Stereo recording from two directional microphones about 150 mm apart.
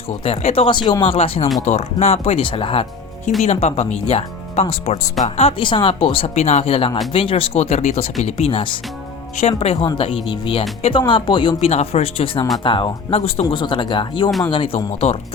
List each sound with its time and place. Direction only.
0.3 s speech: 40° left (ahead or behind)
14.3 s speech: centre (ahead or behind)
14.5 s speech: 35° left (ahead or behind)